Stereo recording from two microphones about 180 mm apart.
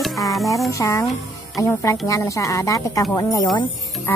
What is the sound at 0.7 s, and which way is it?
A woman's voice, 15° left (ahead or behind).